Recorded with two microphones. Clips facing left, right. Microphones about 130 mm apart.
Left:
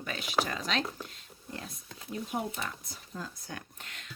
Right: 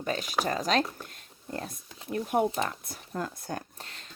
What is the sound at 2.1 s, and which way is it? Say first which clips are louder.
Speech: right 8 dB; 60° right (ahead or behind).